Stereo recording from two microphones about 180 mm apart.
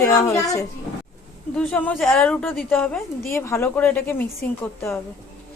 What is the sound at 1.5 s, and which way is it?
A woman's voice, 5° left (ahead or behind).